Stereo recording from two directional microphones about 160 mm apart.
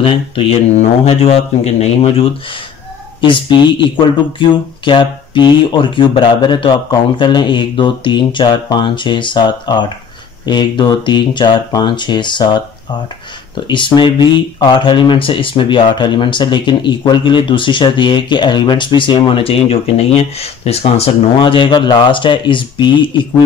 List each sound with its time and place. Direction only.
0.0 s speech: 35° left (ahead or behind)
13.7 s speech: 30° left (ahead or behind)